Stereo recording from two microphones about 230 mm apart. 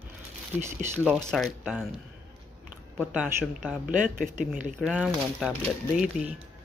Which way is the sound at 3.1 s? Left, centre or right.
Centre.